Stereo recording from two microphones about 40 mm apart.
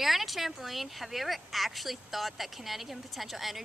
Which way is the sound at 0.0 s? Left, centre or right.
Centre.